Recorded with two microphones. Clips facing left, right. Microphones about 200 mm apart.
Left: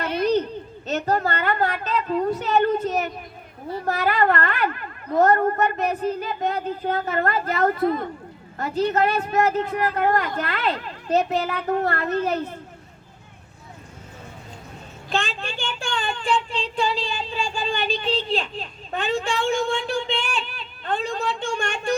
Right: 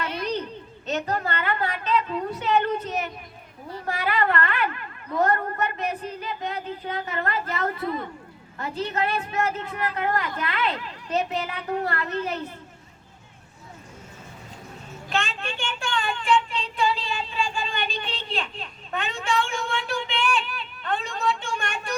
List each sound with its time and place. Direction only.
0.0 s a sound: 40° left (ahead or behind)
0.9 s a woman's voice: 40° left (ahead or behind)
15.1 s child singing: 35° left (ahead or behind)